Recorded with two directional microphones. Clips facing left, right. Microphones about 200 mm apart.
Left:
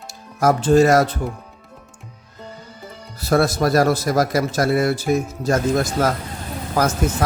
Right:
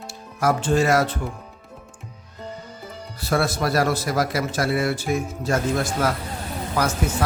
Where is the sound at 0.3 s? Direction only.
40° left (ahead or behind).